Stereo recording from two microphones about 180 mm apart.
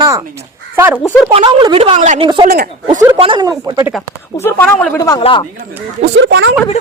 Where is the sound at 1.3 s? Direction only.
30° right (ahead or behind).